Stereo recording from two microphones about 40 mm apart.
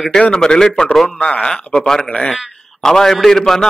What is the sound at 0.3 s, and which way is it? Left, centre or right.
Speech, centre.